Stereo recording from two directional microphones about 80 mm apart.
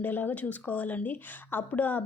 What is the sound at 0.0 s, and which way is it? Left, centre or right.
Speech, left.